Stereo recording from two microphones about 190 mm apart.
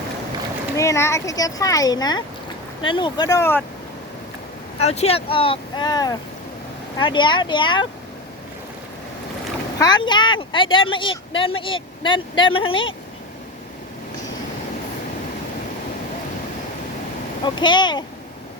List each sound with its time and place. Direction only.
0.8 s speech: 15° left (ahead or behind)
4.8 s speech: 35° left (ahead or behind)
9.7 s speech: 20° left (ahead or behind)
17.4 s speech: 25° left (ahead or behind)